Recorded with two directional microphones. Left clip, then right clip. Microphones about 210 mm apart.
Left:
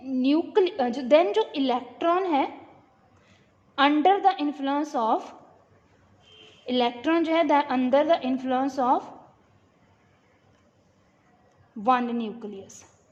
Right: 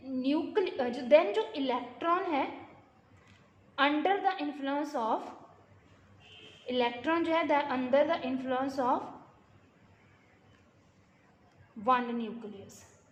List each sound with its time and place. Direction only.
0.0 s a woman's voice: 45° left (ahead or behind)
3.8 s a woman's voice: 45° left (ahead or behind)
6.7 s a woman's voice: 50° left (ahead or behind)
11.8 s a woman's voice: 45° left (ahead or behind)